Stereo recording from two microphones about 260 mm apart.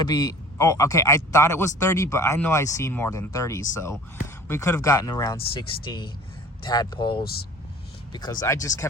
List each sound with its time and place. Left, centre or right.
0.0 s a man's voice: centre